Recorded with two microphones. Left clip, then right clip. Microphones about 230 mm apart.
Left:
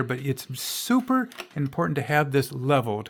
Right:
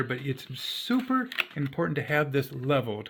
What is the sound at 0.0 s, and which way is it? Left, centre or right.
Speech, left.